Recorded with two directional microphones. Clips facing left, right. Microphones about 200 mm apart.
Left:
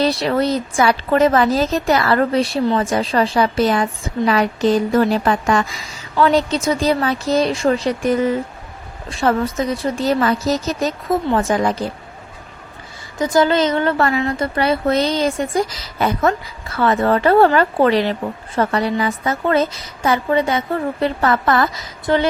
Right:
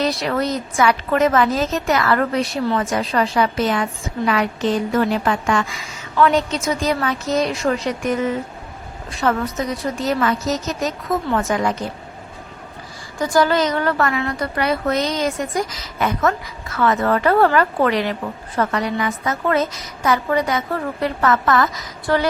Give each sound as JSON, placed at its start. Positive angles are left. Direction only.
{"t": 0.0, "sound": "a woman's voice", "side_deg": 30}
{"t": 13.1, "sound": "a woman's voice", "side_deg": 20}